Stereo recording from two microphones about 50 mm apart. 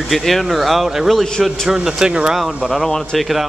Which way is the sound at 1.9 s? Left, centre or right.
Centre.